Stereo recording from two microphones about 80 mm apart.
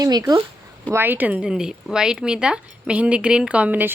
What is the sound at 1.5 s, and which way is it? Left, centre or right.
Speech, centre.